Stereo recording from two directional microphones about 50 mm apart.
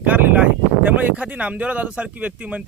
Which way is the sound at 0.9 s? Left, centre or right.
Right.